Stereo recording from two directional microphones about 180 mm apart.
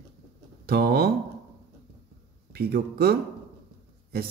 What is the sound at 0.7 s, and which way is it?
Speech, 60° right (ahead or behind).